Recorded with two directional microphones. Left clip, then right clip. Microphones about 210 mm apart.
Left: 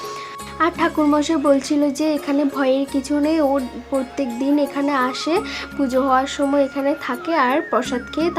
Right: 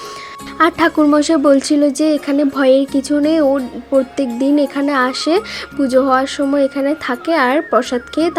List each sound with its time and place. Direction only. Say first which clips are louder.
0.6 s a woman's voice: right 6 dB; 25° right (ahead or behind)
3.9 s speech: right 8 dB; centre (ahead or behind)
4.7 s speech: right 4 dB; 20° right (ahead or behind)